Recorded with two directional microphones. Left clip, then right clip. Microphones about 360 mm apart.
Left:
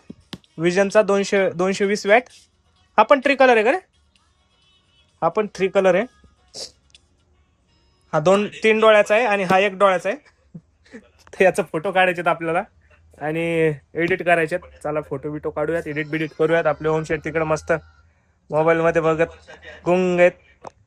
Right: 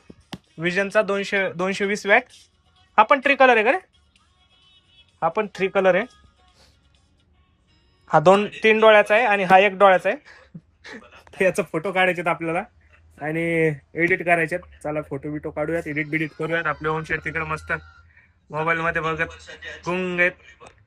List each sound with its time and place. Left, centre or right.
0.3 s speech: centre
5.2 s speech: centre
8.0 s a man's voice: centre
16.6 s speech: centre